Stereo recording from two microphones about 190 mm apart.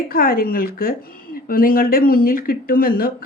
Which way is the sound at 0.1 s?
50° left (ahead or behind).